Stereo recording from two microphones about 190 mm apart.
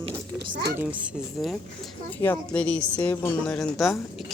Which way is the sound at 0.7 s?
5° right (ahead or behind).